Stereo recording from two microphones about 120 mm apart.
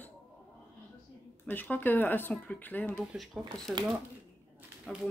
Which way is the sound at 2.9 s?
Centre (ahead or behind).